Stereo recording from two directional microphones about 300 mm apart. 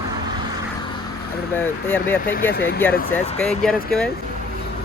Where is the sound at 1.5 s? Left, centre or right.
Centre.